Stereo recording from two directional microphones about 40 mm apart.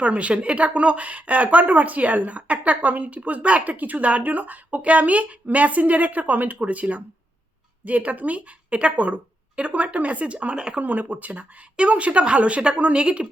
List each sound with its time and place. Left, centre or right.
0.0 s speech: right
10.8 s speech: right